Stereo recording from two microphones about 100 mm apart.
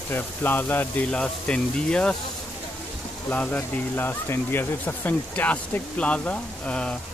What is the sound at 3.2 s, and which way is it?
Speech, 15° left (ahead or behind).